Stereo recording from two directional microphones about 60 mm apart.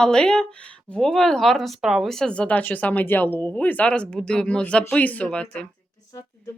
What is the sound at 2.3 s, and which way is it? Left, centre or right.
Speech, left.